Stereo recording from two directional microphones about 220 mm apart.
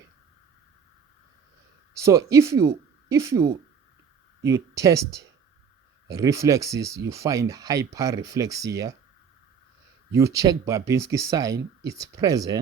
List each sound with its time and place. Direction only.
1.9 s speech: 15° right (ahead or behind)
10.1 s speech: 15° right (ahead or behind)